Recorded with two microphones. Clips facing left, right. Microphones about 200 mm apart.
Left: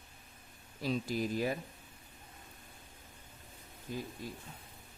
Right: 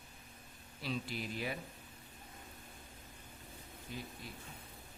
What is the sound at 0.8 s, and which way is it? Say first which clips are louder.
Speech: left 7 dB; 40° left (ahead or behind).